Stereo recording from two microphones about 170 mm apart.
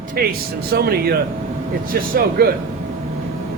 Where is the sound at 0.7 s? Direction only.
65° right (ahead or behind).